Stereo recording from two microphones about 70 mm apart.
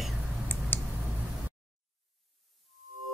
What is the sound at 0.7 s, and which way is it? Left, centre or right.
Clicking, left.